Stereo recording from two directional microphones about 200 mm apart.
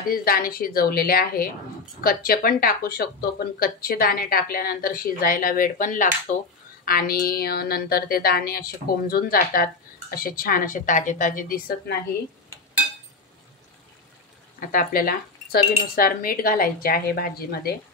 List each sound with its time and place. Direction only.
0.1 s a woman's voice: 45° left (ahead or behind)
14.7 s speech: 45° left (ahead or behind)